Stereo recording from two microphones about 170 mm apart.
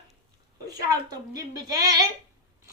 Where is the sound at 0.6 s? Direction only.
20° right (ahead or behind).